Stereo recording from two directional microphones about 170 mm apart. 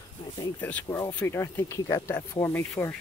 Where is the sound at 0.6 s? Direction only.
10° left (ahead or behind).